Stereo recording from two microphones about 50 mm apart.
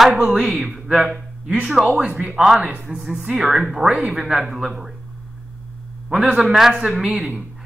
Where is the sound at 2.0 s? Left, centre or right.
Right.